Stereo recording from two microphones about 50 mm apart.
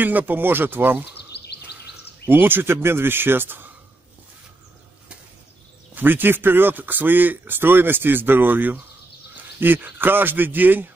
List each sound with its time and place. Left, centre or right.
0.0 s speech: right
2.2 s speech: right
5.9 s speech: right